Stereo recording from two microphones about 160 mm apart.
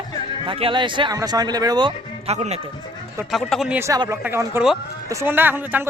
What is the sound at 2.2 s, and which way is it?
Speech, 45° right (ahead or behind).